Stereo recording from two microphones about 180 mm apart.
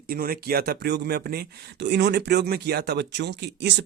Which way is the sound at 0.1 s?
55° right (ahead or behind).